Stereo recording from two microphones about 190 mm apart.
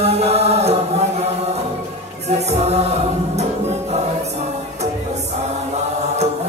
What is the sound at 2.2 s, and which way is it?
Music, 35° right (ahead or behind).